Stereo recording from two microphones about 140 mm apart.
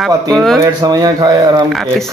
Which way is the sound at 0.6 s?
30° right (ahead or behind).